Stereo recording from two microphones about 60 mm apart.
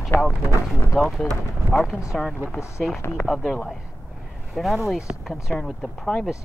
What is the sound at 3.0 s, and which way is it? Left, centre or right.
Speech, left.